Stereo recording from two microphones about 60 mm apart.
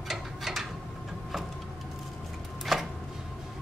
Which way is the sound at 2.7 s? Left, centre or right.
Centre.